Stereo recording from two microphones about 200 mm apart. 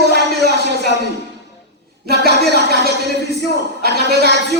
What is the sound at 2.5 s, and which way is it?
Speech, 55° right (ahead or behind).